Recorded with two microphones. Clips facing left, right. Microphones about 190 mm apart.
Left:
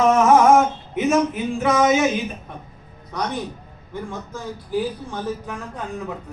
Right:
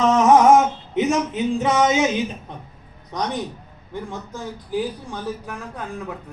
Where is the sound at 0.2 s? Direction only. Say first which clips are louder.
Right 3 dB; 20° right (ahead or behind).